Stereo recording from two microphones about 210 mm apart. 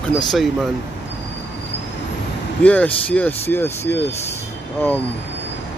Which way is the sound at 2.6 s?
5° left (ahead or behind).